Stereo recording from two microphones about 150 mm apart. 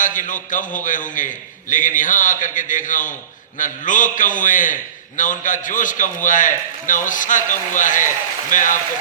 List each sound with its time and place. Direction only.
0.0 s a man's voice: 60° left (ahead or behind)